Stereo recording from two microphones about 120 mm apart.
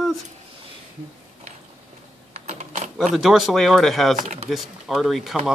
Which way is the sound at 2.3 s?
70° right (ahead or behind).